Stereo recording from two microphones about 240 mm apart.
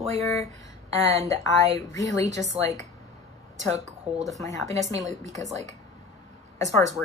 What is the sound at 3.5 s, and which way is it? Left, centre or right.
Speech, right.